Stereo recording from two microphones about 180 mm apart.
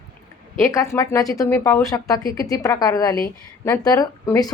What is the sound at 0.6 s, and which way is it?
A woman's voice, 15° left (ahead or behind).